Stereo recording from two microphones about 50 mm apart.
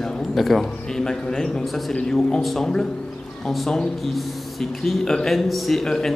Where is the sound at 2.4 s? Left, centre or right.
Centre.